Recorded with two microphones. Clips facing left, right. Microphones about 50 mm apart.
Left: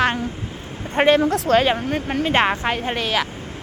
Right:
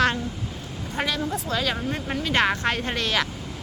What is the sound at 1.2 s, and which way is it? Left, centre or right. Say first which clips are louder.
Speech: left 9 dB; left.